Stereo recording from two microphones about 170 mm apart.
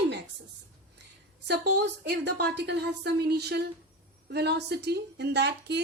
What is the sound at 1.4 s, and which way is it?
A woman's voice, 75° right (ahead or behind).